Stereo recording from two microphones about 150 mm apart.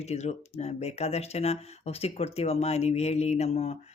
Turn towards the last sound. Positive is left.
turn(degrees=45)  # may be behind; listen again after turning